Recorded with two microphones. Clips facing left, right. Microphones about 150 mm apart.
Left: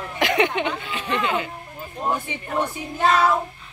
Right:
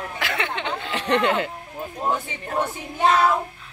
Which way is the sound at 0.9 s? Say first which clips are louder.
Right 7 dB; 75° right (ahead or behind).